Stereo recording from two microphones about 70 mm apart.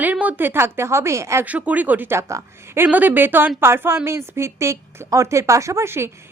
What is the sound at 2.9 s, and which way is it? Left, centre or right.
A woman's voice, right.